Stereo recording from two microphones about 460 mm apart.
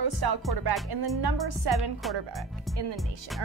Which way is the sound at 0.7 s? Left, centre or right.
Right.